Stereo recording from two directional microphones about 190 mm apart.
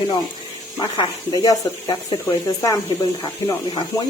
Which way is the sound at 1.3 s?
20° left (ahead or behind).